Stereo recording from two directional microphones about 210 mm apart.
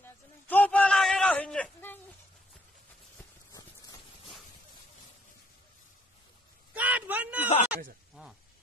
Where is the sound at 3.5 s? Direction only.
15° left (ahead or behind).